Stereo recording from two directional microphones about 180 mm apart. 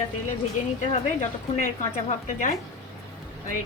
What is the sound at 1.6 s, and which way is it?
Speech, 45° left (ahead or behind).